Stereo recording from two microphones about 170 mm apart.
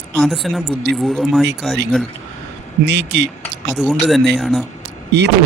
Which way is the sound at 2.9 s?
90° right.